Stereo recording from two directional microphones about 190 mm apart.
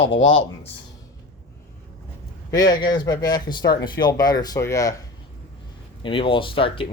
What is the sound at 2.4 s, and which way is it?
Speech, 20° left (ahead or behind).